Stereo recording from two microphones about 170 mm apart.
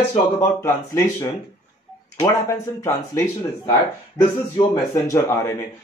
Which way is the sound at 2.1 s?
15° left (ahead or behind).